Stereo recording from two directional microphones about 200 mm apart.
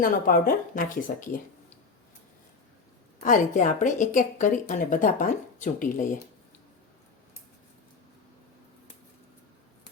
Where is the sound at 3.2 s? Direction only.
40° left (ahead or behind).